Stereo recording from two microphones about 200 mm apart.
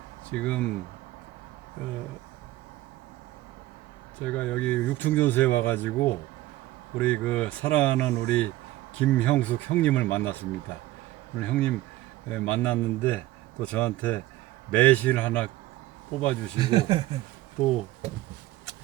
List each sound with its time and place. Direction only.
0.3 s speech: 5° left (ahead or behind)
4.2 s speech: 5° left (ahead or behind)
16.6 s speech: 25° right (ahead or behind)